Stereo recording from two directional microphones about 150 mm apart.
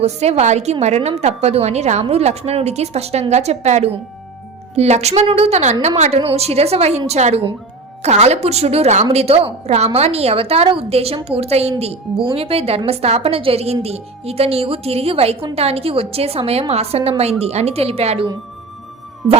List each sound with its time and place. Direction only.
0.0 s a woman's voice: 45° right (ahead or behind)